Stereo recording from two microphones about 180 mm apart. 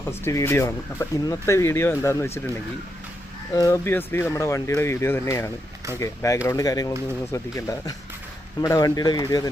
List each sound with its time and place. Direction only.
0.3 s speech: 15° left (ahead or behind)
3.5 s speech: 15° left (ahead or behind)